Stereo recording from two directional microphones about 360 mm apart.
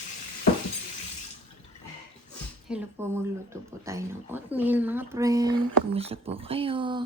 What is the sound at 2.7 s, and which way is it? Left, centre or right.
Speech, centre.